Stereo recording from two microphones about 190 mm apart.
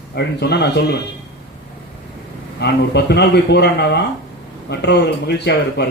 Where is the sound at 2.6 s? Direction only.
60° left (ahead or behind).